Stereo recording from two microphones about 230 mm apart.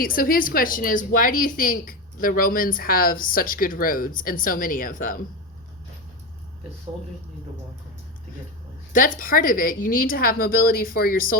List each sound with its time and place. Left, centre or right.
0.0 s a woman's voice: left
8.9 s a woman's voice: left